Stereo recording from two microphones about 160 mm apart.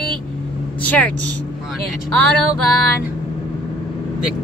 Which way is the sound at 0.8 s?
10° left (ahead or behind).